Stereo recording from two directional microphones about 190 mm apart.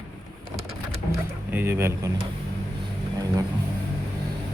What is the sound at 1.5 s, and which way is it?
Speech, 10° right (ahead or behind).